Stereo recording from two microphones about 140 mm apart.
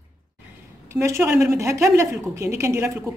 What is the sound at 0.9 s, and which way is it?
A woman's voice, 20° right (ahead or behind).